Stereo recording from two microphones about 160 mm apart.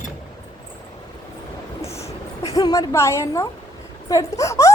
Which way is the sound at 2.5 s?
20° left (ahead or behind).